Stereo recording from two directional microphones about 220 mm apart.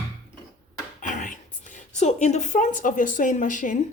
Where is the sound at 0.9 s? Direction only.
35° left (ahead or behind).